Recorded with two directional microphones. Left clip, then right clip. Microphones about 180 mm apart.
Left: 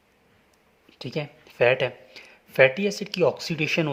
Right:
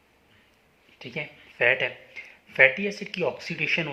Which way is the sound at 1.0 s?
65° left (ahead or behind).